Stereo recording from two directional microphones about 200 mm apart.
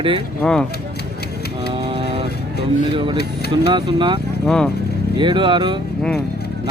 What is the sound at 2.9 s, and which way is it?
Speech, 25° right (ahead or behind).